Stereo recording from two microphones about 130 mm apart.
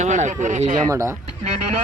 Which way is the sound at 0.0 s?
65° right (ahead or behind).